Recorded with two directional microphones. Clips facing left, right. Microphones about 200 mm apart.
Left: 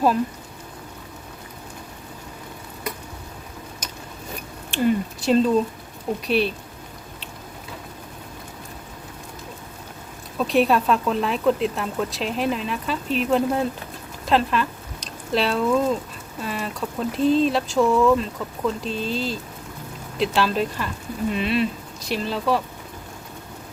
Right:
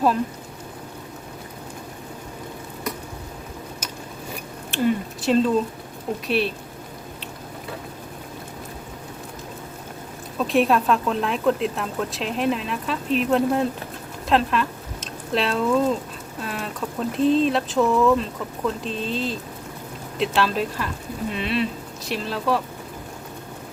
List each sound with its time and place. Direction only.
4.7 s speech: centre (ahead or behind)
10.3 s speech: centre (ahead or behind)